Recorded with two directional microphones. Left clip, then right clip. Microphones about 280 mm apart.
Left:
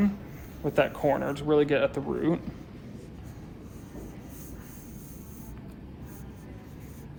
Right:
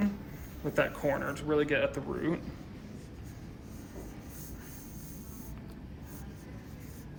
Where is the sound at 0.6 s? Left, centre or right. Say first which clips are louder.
Left 5 dB; left.